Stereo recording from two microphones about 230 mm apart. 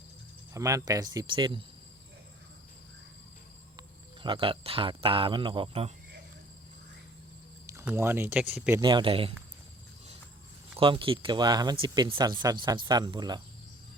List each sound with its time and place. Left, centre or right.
0.5 s speech: centre
3.8 s speech: right
7.7 s speech: centre
8.8 s speech: centre
10.8 s speech: right